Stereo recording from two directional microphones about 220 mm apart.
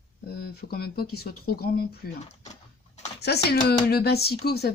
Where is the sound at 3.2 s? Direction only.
50° left (ahead or behind).